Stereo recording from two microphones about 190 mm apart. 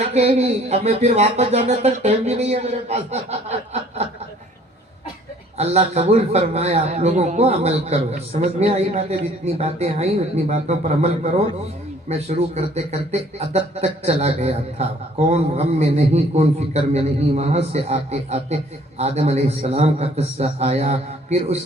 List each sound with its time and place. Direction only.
0.0 s a man's voice: 35° right (ahead or behind)
5.5 s a man's voice: 35° right (ahead or behind)